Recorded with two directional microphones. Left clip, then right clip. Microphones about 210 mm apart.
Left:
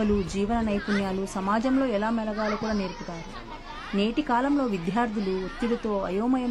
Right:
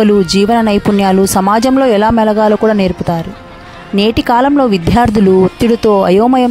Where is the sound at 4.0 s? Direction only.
55° right (ahead or behind).